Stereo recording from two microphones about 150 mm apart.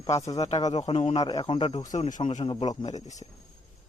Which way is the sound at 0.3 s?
45° left (ahead or behind).